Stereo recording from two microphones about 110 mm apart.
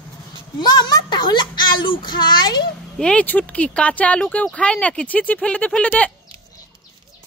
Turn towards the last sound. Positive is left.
turn(degrees=10)  # may be behind; listen again after turning